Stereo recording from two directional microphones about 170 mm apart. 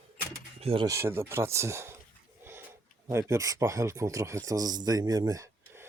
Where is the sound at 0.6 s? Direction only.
35° right (ahead or behind).